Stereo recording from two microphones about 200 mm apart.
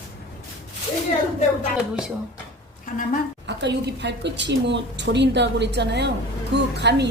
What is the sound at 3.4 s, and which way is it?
A woman's voice, 60° right (ahead or behind).